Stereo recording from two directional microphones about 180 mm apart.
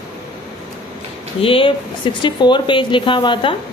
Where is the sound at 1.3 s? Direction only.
30° left (ahead or behind).